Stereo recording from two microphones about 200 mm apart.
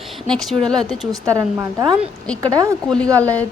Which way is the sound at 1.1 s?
15° right (ahead or behind).